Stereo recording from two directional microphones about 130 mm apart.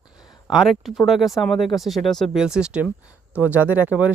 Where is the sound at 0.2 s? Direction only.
30° left (ahead or behind).